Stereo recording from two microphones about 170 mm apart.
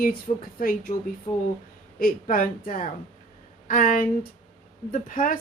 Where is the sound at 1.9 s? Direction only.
55° left (ahead or behind).